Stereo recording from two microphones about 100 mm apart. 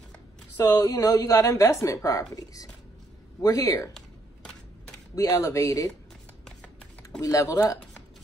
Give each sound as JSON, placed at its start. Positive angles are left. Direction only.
{"t": 0.7, "sound": "a woman's voice", "side_deg": 35}
{"t": 5.1, "sound": "a woman's voice", "side_deg": 35}
{"t": 7.2, "sound": "a woman's voice", "side_deg": 35}